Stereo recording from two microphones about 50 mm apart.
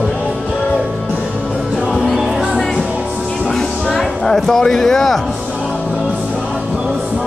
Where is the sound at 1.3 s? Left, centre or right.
Right.